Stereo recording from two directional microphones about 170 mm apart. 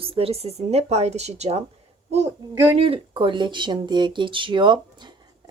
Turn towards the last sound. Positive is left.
turn(degrees=-30)  # may be behind; listen again after turning